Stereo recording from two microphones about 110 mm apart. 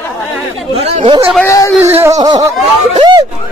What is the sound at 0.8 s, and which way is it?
Speech, 65° right (ahead or behind).